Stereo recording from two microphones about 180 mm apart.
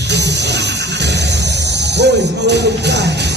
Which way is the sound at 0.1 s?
70° right (ahead or behind).